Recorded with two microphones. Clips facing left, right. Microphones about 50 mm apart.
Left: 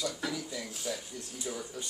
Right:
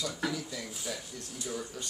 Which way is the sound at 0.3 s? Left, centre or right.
Centre.